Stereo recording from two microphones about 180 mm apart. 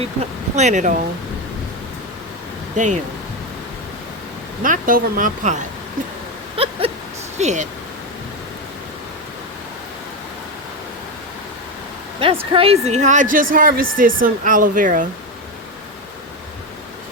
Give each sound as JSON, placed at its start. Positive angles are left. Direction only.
{"t": 0.5, "sound": "a woman's voice", "side_deg": -40}
{"t": 2.7, "sound": "a woman's voice", "side_deg": -45}
{"t": 4.6, "sound": "a woman's voice", "side_deg": -50}
{"t": 6.6, "sound": "a sound", "side_deg": -30}
{"t": 7.3, "sound": "speech", "side_deg": -40}
{"t": 12.2, "sound": "a woman's voice", "side_deg": -30}